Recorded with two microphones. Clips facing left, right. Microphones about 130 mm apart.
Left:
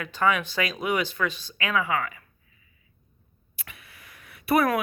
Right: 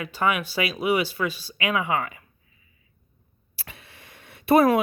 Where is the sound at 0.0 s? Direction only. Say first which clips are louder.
Even; 10° right (ahead or behind).